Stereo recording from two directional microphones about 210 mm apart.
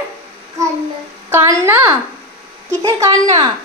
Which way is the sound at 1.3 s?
10° right (ahead or behind).